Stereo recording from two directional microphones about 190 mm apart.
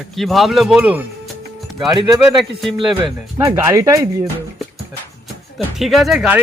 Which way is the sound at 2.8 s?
Centre (ahead or behind).